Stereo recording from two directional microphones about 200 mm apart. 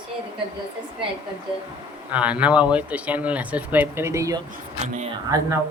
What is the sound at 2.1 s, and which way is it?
Speech, 5° right (ahead or behind).